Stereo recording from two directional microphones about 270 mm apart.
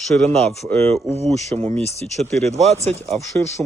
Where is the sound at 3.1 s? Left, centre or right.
Centre.